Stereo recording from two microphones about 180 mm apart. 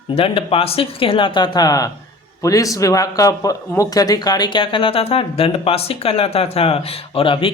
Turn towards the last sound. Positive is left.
turn(degrees=30)  # may be behind; listen again after turning